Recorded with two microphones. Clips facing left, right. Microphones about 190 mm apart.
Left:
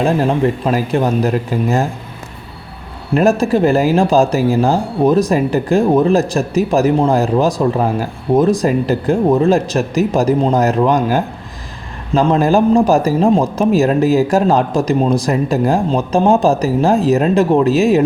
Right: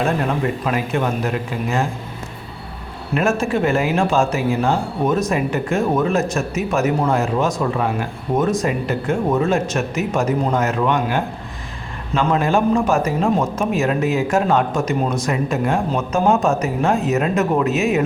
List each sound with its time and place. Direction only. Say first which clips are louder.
0.0 s speech: left 6 dB; 30° left (ahead or behind)
3.2 s speech: left 6 dB; 35° left (ahead or behind)